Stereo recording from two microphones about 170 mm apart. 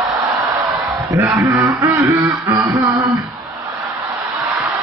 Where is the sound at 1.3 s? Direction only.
15° right (ahead or behind).